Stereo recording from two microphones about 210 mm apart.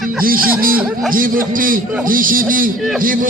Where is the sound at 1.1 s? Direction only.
40° right (ahead or behind).